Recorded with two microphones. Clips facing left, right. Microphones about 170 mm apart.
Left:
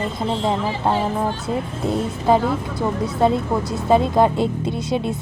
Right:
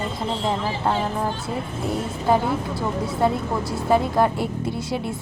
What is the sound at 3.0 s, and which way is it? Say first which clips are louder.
Speech: left 4 dB; 20° left (ahead or behind).